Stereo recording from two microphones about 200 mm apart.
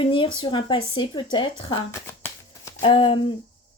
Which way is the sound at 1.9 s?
10° left (ahead or behind).